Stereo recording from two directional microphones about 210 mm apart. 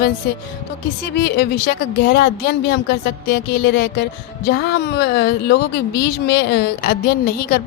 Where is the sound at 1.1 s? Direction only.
50° left (ahead or behind).